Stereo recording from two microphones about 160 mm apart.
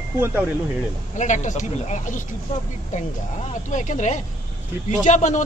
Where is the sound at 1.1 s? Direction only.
50° left (ahead or behind).